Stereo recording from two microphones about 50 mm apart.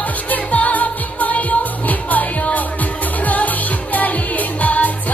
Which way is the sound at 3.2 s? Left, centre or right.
Left.